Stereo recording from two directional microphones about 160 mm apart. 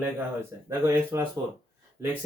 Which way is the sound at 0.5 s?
20° right (ahead or behind).